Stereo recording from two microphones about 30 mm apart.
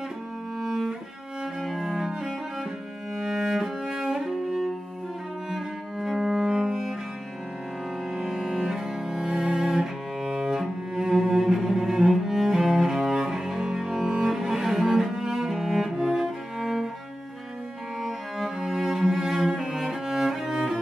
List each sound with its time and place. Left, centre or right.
0.6 s cello: centre
1.6 s cello: centre
2.0 s cello: centre
4.1 s music: centre
5.5 s cello: centre
8.1 s cello: centre
18.7 s cello: centre